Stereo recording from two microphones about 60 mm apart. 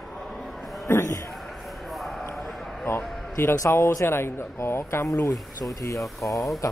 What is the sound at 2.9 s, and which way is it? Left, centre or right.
A man's voice, left.